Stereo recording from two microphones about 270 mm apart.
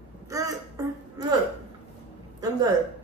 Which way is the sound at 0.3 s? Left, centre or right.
Centre.